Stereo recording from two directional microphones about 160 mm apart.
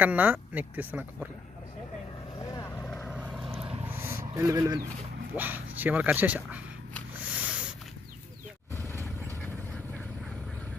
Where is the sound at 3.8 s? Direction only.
15° right (ahead or behind).